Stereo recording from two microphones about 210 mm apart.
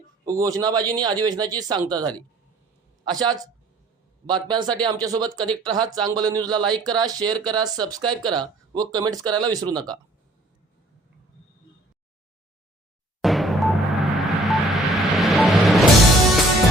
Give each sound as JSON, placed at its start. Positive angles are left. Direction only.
{"t": 0.3, "sound": "a man's voice", "side_deg": -15}
{"t": 4.4, "sound": "speech", "side_deg": -20}
{"t": 13.2, "sound": "music", "side_deg": 0}